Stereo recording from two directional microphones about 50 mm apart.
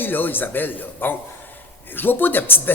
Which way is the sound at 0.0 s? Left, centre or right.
Left.